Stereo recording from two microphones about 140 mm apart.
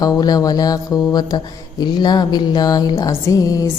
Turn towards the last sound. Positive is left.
turn(degrees=25)  # may be behind; listen again after turning